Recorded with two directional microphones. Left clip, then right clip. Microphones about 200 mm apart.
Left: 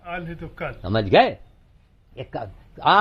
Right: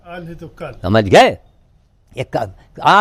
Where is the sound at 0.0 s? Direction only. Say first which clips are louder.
Even; 10° right (ahead or behind).